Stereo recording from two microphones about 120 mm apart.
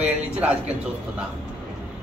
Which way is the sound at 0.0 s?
10° right (ahead or behind).